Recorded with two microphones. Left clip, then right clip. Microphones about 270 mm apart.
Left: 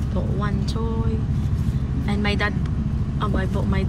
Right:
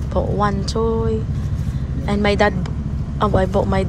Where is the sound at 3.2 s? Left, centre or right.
Centre.